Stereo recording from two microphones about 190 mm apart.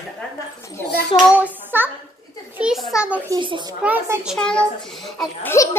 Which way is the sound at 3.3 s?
25° right (ahead or behind).